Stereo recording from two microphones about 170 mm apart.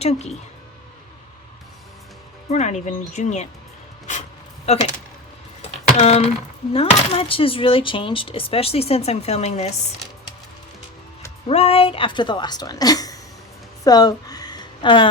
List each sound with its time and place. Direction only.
0.0 s speech: 40° left (ahead or behind)
2.5 s speech: 40° left (ahead or behind)
4.6 s speech: 40° left (ahead or behind)
5.6 s a sound: 40° left (ahead or behind)
6.7 s speech: 35° left (ahead or behind)
11.4 s a woman's voice: 35° left (ahead or behind)
13.8 s a sound: 20° left (ahead or behind)